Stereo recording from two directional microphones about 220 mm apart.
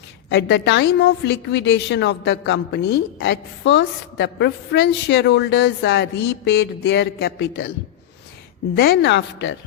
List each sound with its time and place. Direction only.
0.3 s a woman's voice: 50° left (ahead or behind)
8.7 s a woman's voice: 45° left (ahead or behind)